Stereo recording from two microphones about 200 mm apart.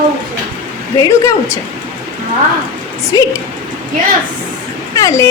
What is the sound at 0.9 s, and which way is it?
Speech, 15° left (ahead or behind).